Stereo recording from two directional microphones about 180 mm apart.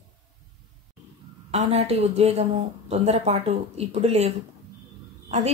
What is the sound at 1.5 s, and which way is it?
A woman's voice, 35° right (ahead or behind).